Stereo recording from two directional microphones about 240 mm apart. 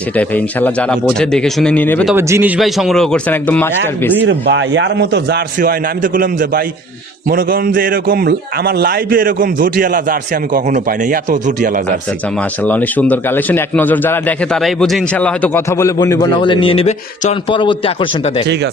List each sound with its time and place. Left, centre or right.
0.2 s speech: centre
2.1 s speech: centre
4.2 s a man's voice: right
12.6 s a man's voice: centre; by 18.4 s left